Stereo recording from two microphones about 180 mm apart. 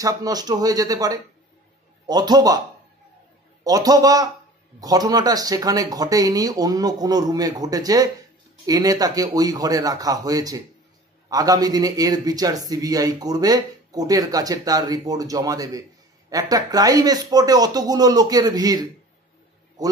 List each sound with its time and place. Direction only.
0.0 s a man's voice: 20° right (ahead or behind)
3.6 s a man's voice: 20° right (ahead or behind)